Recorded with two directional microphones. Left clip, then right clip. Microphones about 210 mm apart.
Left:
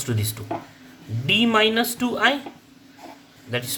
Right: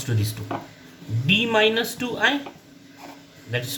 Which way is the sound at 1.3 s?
45° left (ahead or behind).